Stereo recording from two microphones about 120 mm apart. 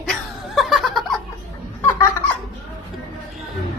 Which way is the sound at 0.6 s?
Centre (ahead or behind).